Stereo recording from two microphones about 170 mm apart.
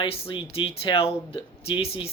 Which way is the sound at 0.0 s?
30° left (ahead or behind).